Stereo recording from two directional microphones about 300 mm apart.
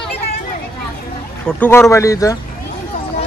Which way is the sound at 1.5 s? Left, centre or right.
Centre.